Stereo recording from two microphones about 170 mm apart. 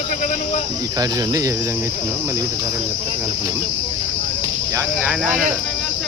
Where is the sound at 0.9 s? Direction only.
20° right (ahead or behind).